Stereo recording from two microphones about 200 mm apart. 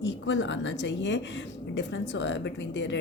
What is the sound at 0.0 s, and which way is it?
Speech, 65° left (ahead or behind).